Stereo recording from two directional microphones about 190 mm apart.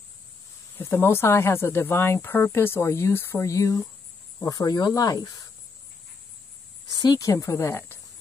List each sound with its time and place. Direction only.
0.7 s speech: 10° left (ahead or behind)
6.9 s speech: 20° left (ahead or behind)